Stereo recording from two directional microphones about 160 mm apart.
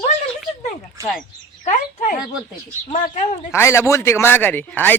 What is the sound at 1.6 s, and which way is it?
Speech, 50° left (ahead or behind).